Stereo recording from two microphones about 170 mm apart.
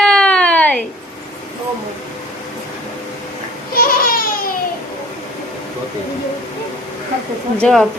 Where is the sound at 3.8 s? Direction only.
60° left (ahead or behind).